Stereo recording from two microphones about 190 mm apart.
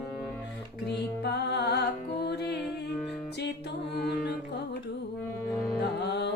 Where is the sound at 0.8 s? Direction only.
60° left (ahead or behind).